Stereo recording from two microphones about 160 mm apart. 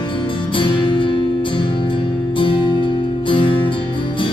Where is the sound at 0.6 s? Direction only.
30° left (ahead or behind).